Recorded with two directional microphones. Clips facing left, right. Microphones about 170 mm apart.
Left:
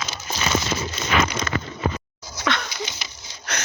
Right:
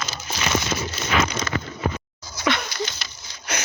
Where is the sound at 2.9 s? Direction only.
15° left (ahead or behind).